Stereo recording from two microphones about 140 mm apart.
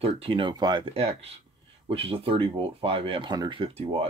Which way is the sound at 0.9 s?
45° right (ahead or behind).